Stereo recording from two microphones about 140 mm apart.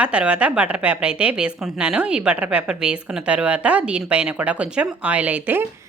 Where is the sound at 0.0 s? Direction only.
10° right (ahead or behind).